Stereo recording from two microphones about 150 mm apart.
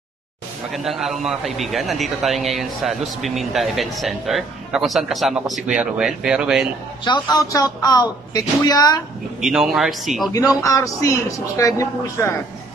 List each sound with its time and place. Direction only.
0.7 s a man's voice: centre (ahead or behind)
7.1 s a woman's voice: 25° left (ahead or behind)
9.4 s a man's voice: centre (ahead or behind)
10.3 s a woman's voice: 25° left (ahead or behind)